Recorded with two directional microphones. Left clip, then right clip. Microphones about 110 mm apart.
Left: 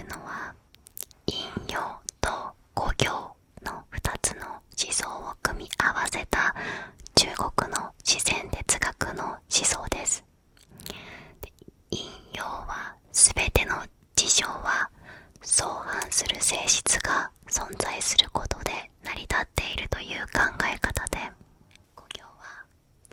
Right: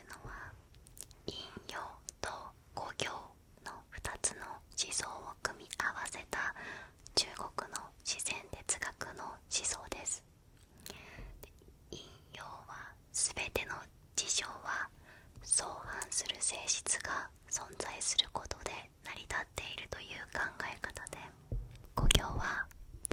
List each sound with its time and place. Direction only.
0.0 s whispering: 35° left (ahead or behind)
10.8 s whispering: 20° left (ahead or behind); by 21.3 s 40° left (ahead or behind)
21.9 s whispering: 50° right (ahead or behind)